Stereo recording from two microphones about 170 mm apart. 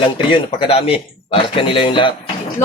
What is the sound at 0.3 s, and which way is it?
Speech, 35° left (ahead or behind).